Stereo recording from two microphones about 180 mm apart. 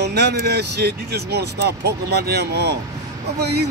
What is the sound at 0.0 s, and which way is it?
Speech, 65° right (ahead or behind).